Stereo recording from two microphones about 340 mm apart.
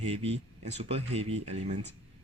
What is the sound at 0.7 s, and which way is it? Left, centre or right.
Speech, centre.